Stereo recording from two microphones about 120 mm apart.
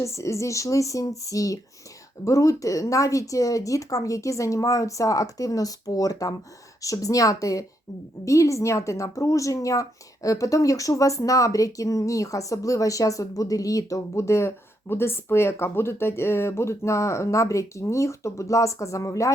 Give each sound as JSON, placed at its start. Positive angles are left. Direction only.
{"t": 0.0, "sound": "speech", "side_deg": 25}